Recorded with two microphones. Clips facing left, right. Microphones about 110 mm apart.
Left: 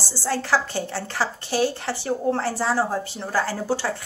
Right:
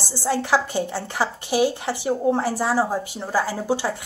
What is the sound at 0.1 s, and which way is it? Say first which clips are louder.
A woman's voice: right 2 dB; 15° right (ahead or behind).